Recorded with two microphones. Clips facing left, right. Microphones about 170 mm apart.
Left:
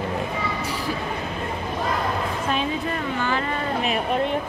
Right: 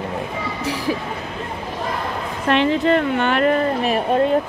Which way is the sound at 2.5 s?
75° right (ahead or behind).